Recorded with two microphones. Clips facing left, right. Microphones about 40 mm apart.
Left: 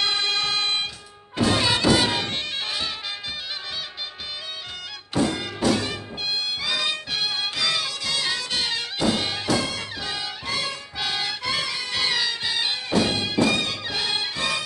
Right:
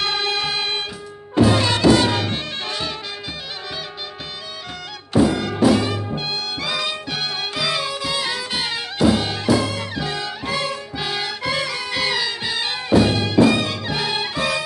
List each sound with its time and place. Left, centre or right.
0.0 s music: centre
5.1 s music: centre
5.6 s music: centre